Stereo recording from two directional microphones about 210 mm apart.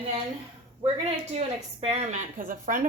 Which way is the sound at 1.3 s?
30° right (ahead or behind).